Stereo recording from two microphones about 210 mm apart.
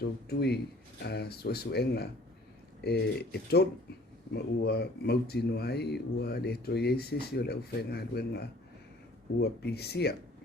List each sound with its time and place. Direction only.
0.3 s speech: 50° left (ahead or behind)